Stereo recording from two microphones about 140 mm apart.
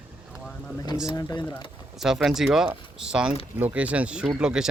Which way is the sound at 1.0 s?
30° left (ahead or behind).